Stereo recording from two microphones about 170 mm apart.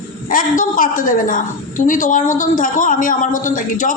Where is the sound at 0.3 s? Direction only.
55° left (ahead or behind).